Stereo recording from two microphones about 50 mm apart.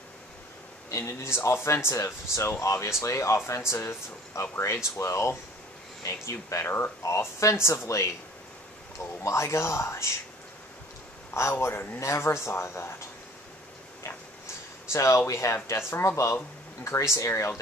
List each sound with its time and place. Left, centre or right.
0.8 s speech: left
2.6 s speech: left
6.0 s speech: left
6.6 s speech: left
7.0 s speech: left
9.2 s speech: left
11.4 s speech: left
14.9 s speech: left
15.9 s speech: left